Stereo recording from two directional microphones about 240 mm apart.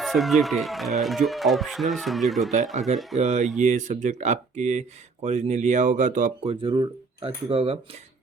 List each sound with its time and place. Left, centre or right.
0.0 s speech: centre
3.2 s speech: right